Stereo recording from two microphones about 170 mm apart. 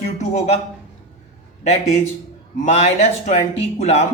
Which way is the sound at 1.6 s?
40° left (ahead or behind).